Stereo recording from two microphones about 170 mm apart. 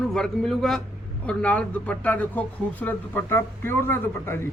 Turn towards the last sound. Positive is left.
turn(degrees=15)  # may be behind; listen again after turning